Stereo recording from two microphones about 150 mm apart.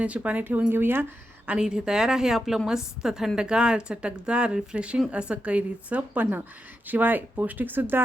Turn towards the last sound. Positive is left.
turn(degrees=-15)  # may be behind; listen again after turning